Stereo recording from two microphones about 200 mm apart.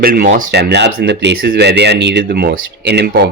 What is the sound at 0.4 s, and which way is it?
Speech, 55° right (ahead or behind).